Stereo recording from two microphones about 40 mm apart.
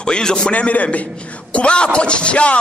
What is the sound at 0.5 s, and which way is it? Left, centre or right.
A man's voice, left.